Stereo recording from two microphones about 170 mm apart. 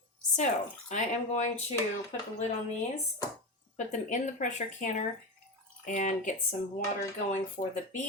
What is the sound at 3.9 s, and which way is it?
Speech, 45° left (ahead or behind).